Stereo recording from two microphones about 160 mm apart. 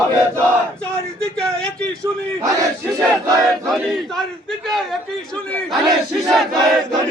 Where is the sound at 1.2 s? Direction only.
5° left (ahead or behind).